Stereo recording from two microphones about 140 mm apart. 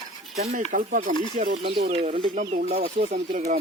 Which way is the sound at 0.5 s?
70° right (ahead or behind).